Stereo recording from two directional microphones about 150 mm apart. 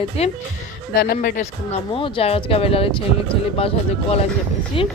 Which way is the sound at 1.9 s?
35° left (ahead or behind).